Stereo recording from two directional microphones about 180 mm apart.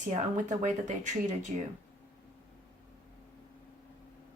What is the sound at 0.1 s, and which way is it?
Speech, 45° right (ahead or behind).